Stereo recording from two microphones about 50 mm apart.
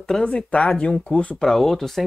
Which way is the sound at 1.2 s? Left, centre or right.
Left.